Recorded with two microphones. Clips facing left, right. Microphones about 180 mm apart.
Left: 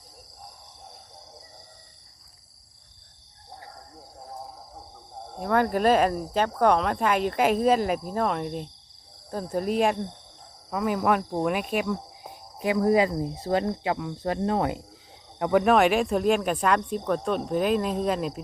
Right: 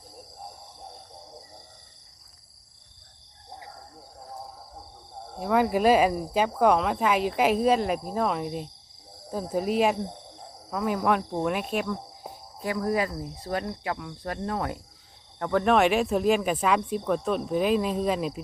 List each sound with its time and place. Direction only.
5.3 s speech: centre (ahead or behind)
12.3 s speech: 20° left (ahead or behind)
15.4 s cricket: 15° left (ahead or behind)
15.6 s speech: centre (ahead or behind)